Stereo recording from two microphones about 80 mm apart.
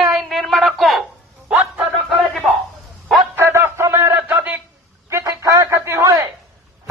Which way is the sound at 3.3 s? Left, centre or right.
Right.